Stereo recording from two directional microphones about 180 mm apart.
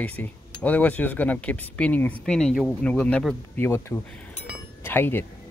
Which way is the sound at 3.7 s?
15° left (ahead or behind).